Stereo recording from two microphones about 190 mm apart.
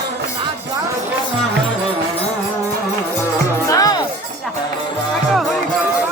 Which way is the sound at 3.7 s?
20° left (ahead or behind).